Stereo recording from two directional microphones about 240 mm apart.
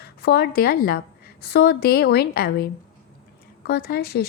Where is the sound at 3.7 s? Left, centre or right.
Left.